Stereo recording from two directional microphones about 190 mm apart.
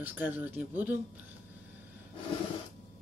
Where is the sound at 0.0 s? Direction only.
10° right (ahead or behind).